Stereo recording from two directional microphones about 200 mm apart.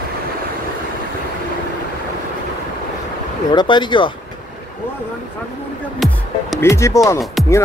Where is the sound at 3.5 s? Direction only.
20° left (ahead or behind).